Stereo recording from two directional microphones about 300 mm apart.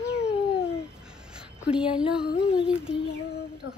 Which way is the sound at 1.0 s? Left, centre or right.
Centre.